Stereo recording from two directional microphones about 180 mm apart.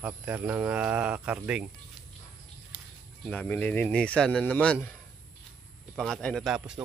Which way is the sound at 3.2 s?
5° left (ahead or behind).